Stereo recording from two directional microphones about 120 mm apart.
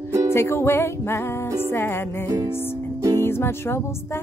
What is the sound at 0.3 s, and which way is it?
Music, 20° left (ahead or behind).